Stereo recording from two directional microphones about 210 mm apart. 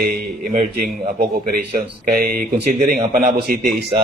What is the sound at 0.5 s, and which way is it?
A man's voice, 35° right (ahead or behind).